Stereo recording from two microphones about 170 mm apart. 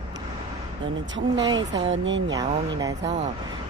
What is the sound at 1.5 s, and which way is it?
Speech, 90° right.